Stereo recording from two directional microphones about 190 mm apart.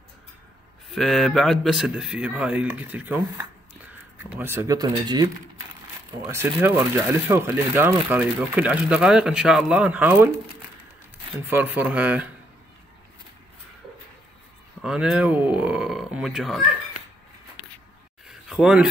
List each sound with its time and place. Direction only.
0.9 s a man's voice: centre (ahead or behind)
11.3 s speech: 10° right (ahead or behind)
14.8 s speech: 5° right (ahead or behind)
18.3 s a sound: 5° right (ahead or behind)